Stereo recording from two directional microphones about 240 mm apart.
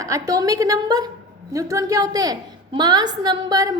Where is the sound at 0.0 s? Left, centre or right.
Centre.